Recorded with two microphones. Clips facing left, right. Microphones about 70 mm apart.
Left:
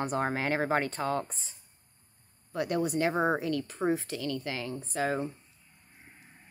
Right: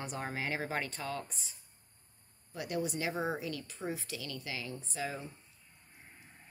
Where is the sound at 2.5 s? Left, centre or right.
Left.